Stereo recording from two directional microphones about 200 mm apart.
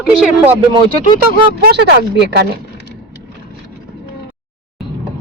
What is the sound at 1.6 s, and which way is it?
Speech, 55° right (ahead or behind).